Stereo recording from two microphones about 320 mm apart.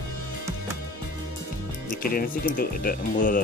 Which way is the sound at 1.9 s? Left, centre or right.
Left.